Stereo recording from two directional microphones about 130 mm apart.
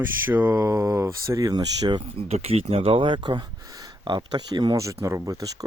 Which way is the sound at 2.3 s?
50° right (ahead or behind).